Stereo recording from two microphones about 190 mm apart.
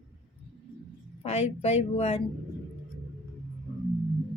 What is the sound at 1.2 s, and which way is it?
Speech, 35° left (ahead or behind).